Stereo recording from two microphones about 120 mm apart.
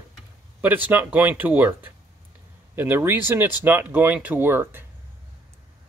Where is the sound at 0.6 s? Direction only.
15° right (ahead or behind).